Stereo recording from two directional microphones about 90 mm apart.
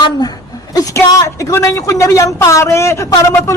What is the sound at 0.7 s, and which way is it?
A woman's voice, 45° left (ahead or behind).